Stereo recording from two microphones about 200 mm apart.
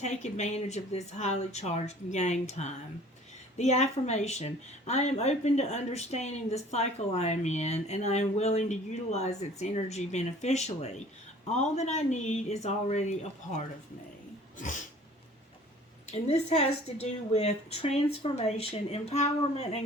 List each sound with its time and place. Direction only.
0.0 s speech: 35° left (ahead or behind)
16.2 s speech: 30° left (ahead or behind)